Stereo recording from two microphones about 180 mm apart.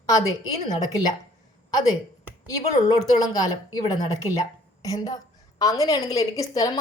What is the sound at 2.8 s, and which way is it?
Speech, 20° left (ahead or behind).